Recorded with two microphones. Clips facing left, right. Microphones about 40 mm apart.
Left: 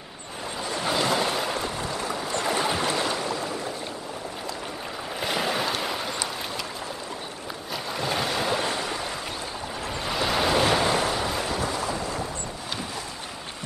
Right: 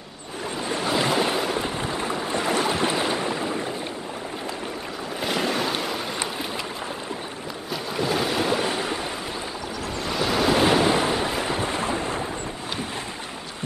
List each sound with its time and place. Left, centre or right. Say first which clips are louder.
0.9 s boat: right 2 dB; centre
1.6 s boat: right 2 dB; right
2.5 s boat: right 2 dB; centre
2.8 s boat: right 2 dB; centre
5.2 s boat: right 2 dB; centre
5.8 s a sound: right 1 dB; centre
7.7 s boat: right 3 dB; centre
10.0 s waves: right 2 dB; centre
10.6 s waves: right 3 dB; centre
11.0 s waves: right 2 dB; right